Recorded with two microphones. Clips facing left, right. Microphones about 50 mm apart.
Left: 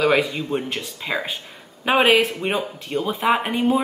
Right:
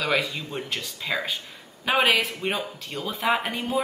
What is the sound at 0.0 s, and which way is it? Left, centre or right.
A woman's voice, left.